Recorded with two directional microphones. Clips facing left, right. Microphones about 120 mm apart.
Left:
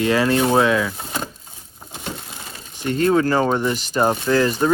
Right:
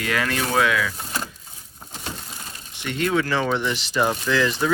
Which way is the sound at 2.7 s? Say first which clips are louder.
Left 6 dB; 40° left (ahead or behind).